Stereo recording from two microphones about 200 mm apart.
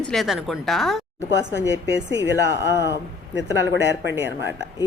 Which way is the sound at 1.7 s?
60° right (ahead or behind).